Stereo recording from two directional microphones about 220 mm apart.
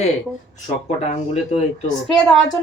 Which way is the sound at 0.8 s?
30° left (ahead or behind).